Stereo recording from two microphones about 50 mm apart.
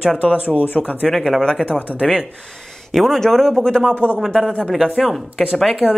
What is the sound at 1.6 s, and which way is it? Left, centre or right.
Speech, right.